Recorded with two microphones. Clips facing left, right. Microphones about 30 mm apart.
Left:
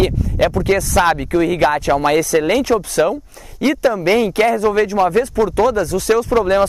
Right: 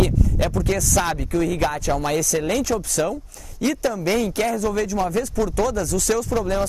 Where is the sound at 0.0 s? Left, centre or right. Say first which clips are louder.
Left 5 dB; left.